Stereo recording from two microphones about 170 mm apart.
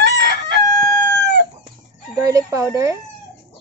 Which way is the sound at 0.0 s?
85° right.